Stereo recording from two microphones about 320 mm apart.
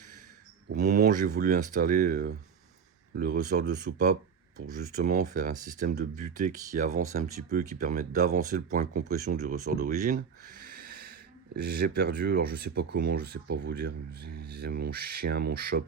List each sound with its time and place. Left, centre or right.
0.7 s speech: right